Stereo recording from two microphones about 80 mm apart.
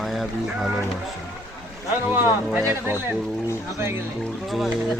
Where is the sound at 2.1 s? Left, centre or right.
Right.